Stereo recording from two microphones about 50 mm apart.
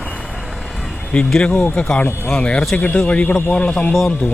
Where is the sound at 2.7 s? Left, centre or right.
Left.